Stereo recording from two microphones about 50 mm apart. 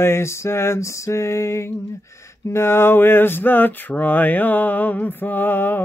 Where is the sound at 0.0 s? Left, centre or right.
Left.